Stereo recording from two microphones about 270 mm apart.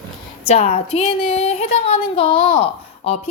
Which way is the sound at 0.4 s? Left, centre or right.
Left.